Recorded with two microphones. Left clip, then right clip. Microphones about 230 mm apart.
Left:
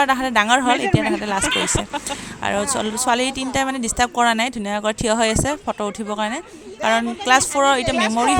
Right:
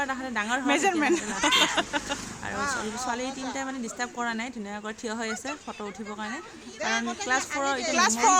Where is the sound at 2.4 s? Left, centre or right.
Left.